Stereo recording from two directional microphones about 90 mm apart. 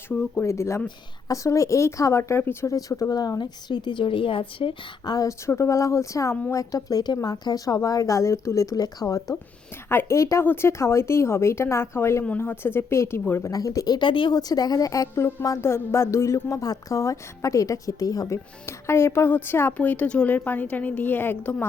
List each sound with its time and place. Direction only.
0.3 s speech: 30° left (ahead or behind)
2.7 s speech: 40° left (ahead or behind); by 5.1 s 70° left (ahead or behind)
5.5 s speech: 35° left (ahead or behind)
9.9 s speech: 30° left (ahead or behind)
13.5 s speech: 40° left (ahead or behind)
14.1 s speech: 65° left (ahead or behind)
14.3 s speech: 45° left (ahead or behind)
18.6 s speech: 30° left (ahead or behind)